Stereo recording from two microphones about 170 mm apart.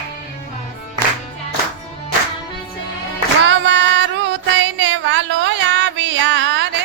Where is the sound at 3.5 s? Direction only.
90° right.